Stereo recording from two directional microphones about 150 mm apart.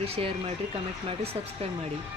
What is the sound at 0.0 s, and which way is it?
Speech, 40° right (ahead or behind).